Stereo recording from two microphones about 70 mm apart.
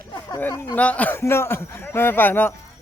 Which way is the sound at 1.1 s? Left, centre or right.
Left.